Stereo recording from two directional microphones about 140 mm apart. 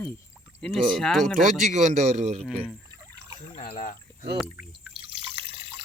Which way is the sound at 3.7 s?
55° left (ahead or behind).